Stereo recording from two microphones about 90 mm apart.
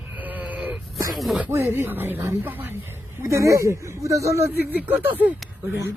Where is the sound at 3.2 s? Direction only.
35° right (ahead or behind).